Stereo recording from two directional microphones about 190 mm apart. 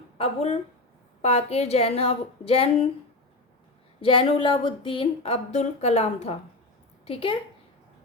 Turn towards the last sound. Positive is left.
turn(degrees=30)  # may be behind; listen again after turning